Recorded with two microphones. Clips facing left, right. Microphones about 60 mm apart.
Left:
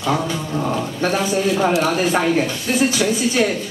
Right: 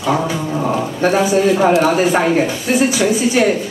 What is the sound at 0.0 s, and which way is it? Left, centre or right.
A man's voice, centre.